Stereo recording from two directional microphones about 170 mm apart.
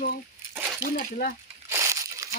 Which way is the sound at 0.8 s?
60° left (ahead or behind).